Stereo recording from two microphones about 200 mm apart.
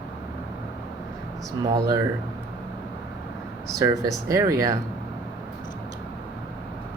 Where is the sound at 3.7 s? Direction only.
15° right (ahead or behind).